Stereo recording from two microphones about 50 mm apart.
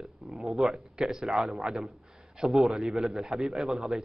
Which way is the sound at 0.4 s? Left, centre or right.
Centre.